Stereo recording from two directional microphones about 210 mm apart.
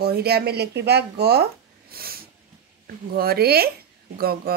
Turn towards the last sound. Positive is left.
turn(degrees=-45)  # may be behind; listen again after turning